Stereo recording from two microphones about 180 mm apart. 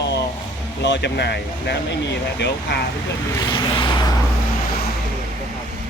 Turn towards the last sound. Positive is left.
turn(degrees=25)  # may be behind; listen again after turning